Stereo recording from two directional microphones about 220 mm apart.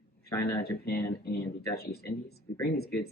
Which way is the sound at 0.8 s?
45° left (ahead or behind).